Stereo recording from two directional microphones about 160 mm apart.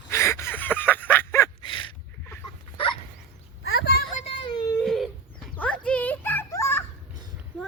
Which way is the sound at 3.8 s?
80° left.